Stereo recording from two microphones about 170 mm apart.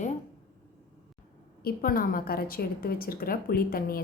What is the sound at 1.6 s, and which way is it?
A woman's voice, 60° left (ahead or behind).